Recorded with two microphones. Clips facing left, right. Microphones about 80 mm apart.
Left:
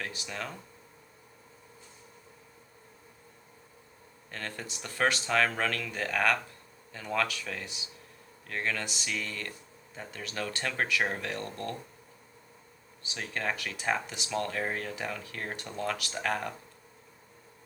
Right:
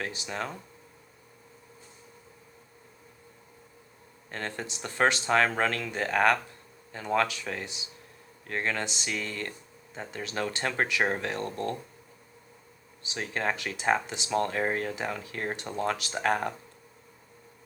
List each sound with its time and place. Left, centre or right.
0.0 s speech: right
4.3 s speech: right
13.0 s speech: right